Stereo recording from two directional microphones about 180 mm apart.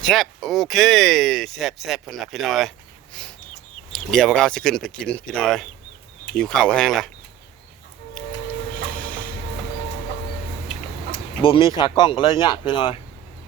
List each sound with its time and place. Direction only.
0.0 s speech: centre (ahead or behind)
8.2 s train: 5° left (ahead or behind)
9.0 s a sound: 10° left (ahead or behind)
11.4 s speech: 30° left (ahead or behind)